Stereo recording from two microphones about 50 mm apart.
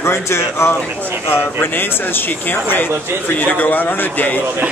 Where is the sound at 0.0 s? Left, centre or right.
Left.